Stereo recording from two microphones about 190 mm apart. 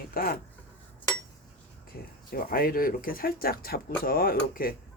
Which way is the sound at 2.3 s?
50° left (ahead or behind).